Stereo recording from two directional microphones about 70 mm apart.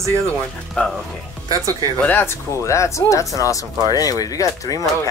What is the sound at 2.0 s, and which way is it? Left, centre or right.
Speech, left.